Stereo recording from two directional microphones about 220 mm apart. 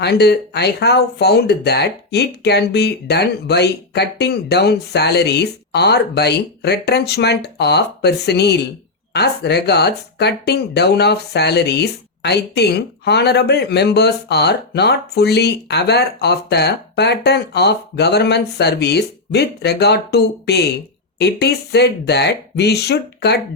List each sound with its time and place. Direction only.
0.0 s speech: 50° left (ahead or behind)